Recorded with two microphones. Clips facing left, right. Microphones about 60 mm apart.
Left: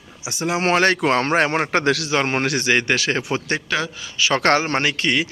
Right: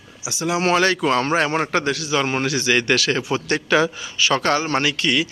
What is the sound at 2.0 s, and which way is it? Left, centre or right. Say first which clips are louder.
Speech: left 1 dB; left.